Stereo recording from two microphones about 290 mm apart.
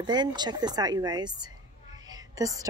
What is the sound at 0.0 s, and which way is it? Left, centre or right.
A woman's voice, centre.